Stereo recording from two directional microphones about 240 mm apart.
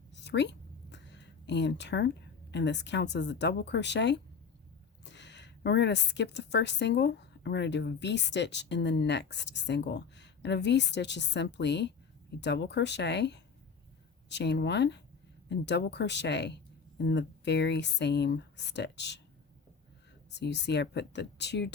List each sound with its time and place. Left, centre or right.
0.1 s a woman's voice: left
20.3 s speech: left